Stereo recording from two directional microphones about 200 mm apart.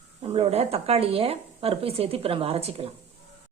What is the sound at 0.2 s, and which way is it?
Speech, 30° right (ahead or behind).